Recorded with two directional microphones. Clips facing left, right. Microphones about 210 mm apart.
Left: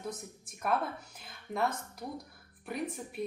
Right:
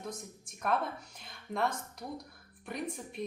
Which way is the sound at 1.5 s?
5° left (ahead or behind).